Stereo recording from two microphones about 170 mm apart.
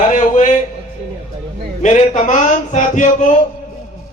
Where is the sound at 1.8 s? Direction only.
45° left (ahead or behind).